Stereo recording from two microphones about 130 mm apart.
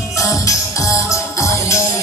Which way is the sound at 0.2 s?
25° left (ahead or behind).